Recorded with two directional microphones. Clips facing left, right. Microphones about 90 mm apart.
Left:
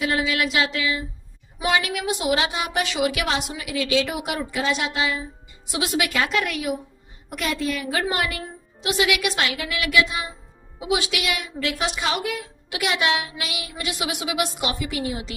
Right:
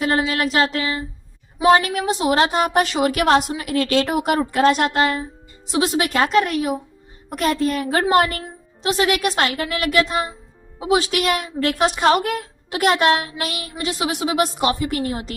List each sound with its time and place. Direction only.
0.0 s a woman's voice: 40° right (ahead or behind)
5.6 s a woman's voice: 35° right (ahead or behind)